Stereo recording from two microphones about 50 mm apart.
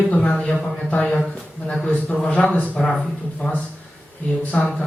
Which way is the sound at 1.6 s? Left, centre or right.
Centre.